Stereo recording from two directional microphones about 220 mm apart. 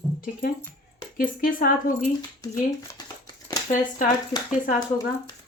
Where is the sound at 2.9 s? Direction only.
15° left (ahead or behind).